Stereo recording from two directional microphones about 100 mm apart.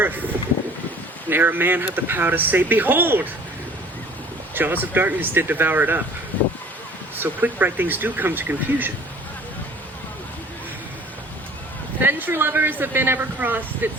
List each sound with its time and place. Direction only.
1.3 s speech: 20° right (ahead or behind)
4.5 s speech: 20° right (ahead or behind)
7.2 s speech: 20° right (ahead or behind)
12.0 s speech: 20° right (ahead or behind)